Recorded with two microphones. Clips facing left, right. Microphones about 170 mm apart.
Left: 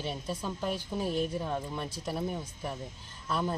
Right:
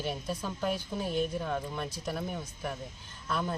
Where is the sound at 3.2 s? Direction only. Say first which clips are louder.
Left 1 dB; 5° left (ahead or behind).